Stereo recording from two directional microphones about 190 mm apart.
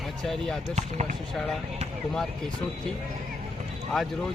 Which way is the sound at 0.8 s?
35° right (ahead or behind).